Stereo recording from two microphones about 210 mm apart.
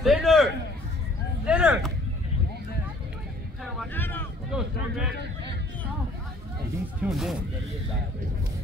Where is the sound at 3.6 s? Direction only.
5° left (ahead or behind).